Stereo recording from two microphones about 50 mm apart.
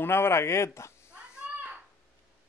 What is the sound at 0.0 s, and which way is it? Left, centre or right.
Speech, left.